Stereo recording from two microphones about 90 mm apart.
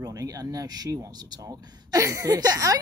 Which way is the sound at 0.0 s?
40° right (ahead or behind).